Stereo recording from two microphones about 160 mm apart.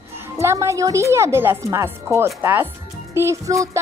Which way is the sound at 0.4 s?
15° right (ahead or behind).